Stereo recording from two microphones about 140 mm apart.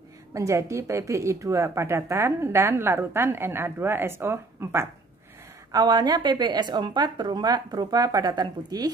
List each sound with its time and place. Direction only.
0.3 s speech: 20° right (ahead or behind)